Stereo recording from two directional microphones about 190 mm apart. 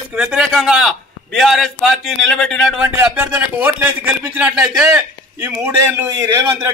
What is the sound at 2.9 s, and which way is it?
A man's voice, 10° right (ahead or behind).